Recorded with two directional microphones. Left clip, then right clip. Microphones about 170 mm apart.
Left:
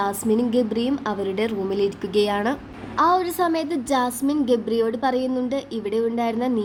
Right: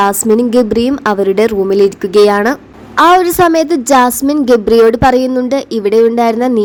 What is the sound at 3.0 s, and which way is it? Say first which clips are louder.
Speech: right 12 dB; 50° right (ahead or behind).